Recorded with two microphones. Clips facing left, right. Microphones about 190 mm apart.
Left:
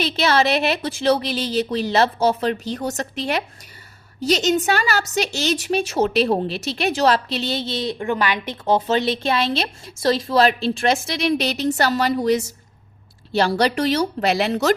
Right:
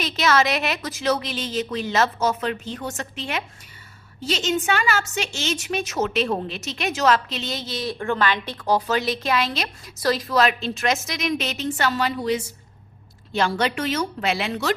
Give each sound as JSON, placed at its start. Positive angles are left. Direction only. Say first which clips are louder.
{"t": 0.0, "sound": "a woman's voice", "louder": "left 2 dB", "side_deg": 30}